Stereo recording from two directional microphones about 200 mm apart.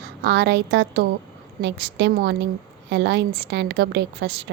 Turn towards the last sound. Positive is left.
turn(degrees=-55)  # may be behind; listen again after turning